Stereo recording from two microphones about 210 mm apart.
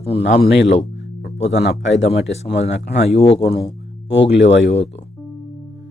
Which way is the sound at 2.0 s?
55° left (ahead or behind).